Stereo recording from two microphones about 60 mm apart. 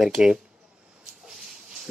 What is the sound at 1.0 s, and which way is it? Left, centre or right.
Dog, centre.